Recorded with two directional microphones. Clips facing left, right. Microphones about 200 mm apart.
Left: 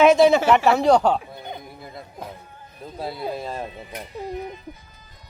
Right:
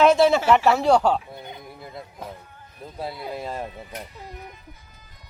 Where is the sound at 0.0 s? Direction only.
Centre (ahead or behind).